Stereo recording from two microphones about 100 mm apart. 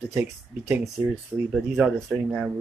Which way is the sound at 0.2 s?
10° right (ahead or behind).